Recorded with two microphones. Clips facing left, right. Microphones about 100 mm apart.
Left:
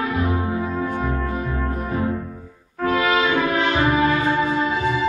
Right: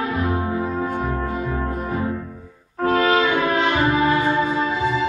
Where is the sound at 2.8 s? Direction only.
35° right (ahead or behind).